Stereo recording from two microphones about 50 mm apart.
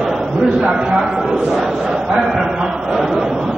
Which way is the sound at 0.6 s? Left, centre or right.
Centre.